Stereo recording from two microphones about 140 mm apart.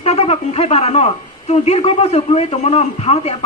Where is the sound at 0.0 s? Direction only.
50° left (ahead or behind).